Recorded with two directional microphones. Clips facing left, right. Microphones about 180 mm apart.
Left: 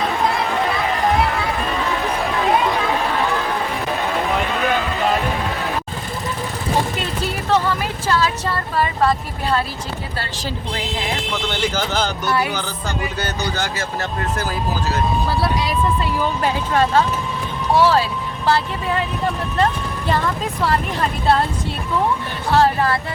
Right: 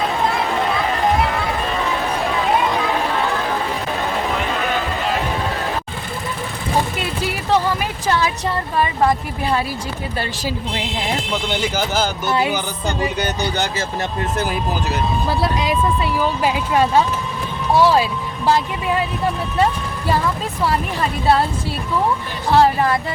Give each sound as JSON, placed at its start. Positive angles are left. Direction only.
{"t": 7.0, "sound": "a sound", "side_deg": -10}
{"t": 10.2, "sound": "speech", "side_deg": -15}
{"t": 12.3, "sound": "speech", "side_deg": -20}
{"t": 22.5, "sound": "speech", "side_deg": -15}